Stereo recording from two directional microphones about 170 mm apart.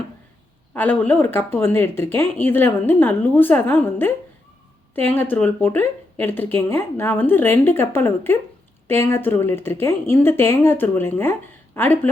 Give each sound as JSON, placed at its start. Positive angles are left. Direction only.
{"t": 0.7, "sound": "speech", "side_deg": 10}